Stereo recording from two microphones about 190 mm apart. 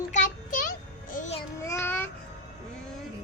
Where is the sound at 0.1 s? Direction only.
45° left (ahead or behind).